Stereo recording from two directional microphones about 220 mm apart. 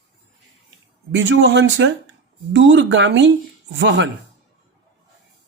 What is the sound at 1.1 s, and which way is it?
Speech, 55° right (ahead or behind).